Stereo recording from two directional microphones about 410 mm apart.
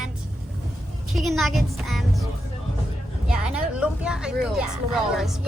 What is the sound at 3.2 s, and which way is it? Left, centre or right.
Speech, centre.